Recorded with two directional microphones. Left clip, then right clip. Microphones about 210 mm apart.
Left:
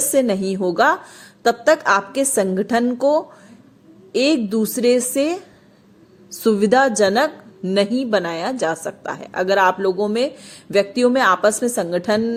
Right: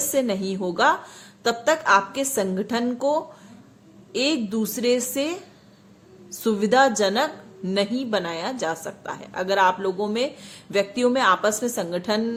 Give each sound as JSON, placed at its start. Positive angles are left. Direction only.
{"t": 0.0, "sound": "a woman's voice", "side_deg": 30}